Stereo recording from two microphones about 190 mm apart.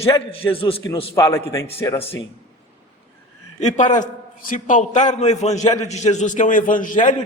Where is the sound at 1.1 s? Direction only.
15° left (ahead or behind).